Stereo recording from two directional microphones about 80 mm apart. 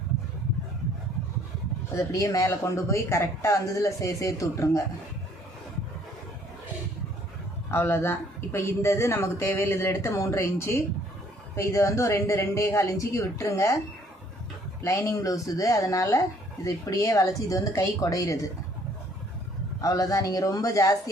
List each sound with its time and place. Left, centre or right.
2.0 s speech: left
7.7 s speech: left
14.8 s speech: left
19.8 s speech: left